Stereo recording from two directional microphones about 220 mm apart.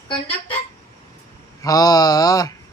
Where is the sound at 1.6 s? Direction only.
15° left (ahead or behind).